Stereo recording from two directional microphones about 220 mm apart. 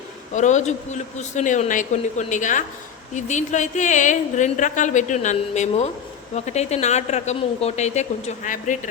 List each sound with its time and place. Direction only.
0.3 s a woman's voice: 35° left (ahead or behind)